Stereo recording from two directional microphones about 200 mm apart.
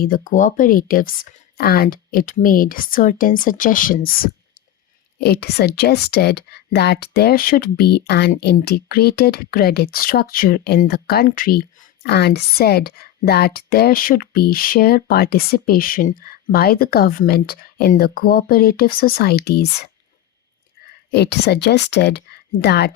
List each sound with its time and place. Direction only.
0.0 s speech: 45° left (ahead or behind)
21.1 s speech: 55° left (ahead or behind)